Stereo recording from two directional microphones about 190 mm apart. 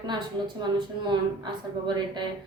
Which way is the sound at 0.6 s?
25° right (ahead or behind).